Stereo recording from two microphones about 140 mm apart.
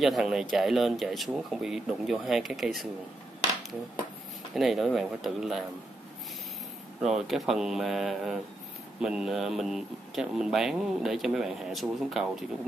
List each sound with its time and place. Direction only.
0.0 s speech: 5° right (ahead or behind)
4.6 s speech: centre (ahead or behind)
7.0 s speech: 5° right (ahead or behind)